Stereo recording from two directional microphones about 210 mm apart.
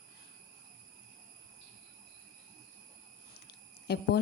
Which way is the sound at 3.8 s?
50° left (ahead or behind).